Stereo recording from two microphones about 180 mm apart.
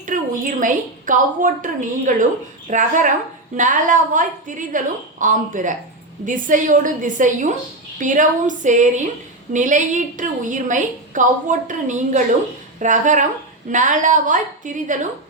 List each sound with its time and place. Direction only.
0.0 s a woman's voice: 45° right (ahead or behind)